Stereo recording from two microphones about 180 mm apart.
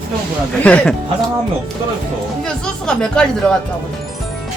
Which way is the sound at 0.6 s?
5° left (ahead or behind).